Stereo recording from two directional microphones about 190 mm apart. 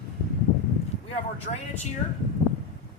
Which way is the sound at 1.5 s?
35° left (ahead or behind).